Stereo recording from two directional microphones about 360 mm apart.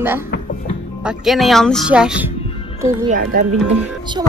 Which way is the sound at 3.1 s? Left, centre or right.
Right.